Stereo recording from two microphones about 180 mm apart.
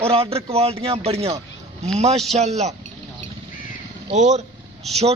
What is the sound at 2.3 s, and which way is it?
Speech, 40° right (ahead or behind).